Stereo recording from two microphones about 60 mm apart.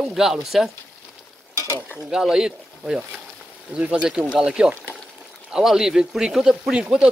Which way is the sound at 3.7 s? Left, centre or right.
Right.